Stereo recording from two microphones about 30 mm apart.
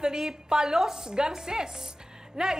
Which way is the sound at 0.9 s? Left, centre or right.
Right.